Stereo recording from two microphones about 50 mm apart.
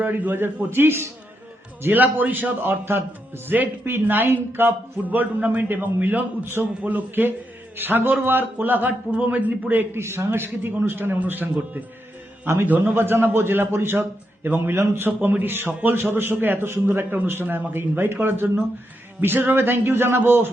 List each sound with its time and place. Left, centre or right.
0.0 s a man's voice: right
0.4 s a man's voice: right
1.9 s a man's voice: right
2.6 s a man's voice: right
6.8 s a man's voice: right
9.9 s a man's voice: right
12.6 s a man's voice: right
12.9 s a man's voice: right
17.4 s a man's voice: right
17.7 s a man's voice: right